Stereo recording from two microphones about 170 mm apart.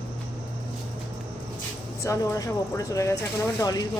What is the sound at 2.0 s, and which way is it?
Speech, 20° left (ahead or behind).